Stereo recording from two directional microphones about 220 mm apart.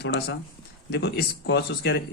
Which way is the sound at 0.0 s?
50° left (ahead or behind).